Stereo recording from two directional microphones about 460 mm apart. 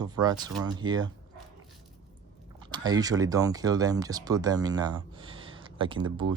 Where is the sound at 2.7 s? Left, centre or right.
Centre.